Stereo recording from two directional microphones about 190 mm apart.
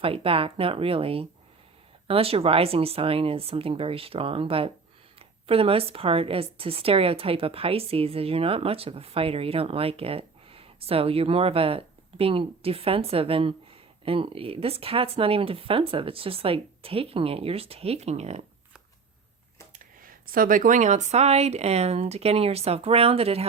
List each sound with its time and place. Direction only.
0.0 s a woman's voice: 30° right (ahead or behind)
20.0 s a woman's voice: 50° right (ahead or behind); by 23.5 s 30° right (ahead or behind)